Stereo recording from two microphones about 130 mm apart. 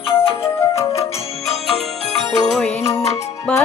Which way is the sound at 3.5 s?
10° left (ahead or behind).